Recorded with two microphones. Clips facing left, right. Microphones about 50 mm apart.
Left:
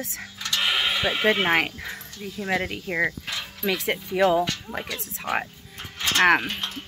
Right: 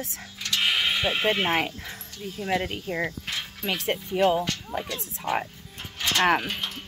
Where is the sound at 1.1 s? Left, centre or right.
Left.